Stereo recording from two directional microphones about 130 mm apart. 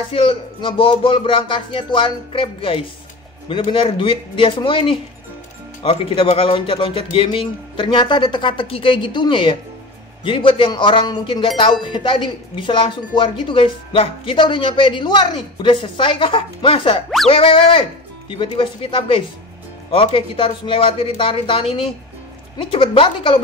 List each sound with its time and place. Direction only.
0.1 s speech: 40° left (ahead or behind)